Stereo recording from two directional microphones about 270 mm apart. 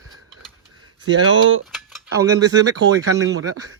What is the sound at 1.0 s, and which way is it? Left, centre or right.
Speech, right.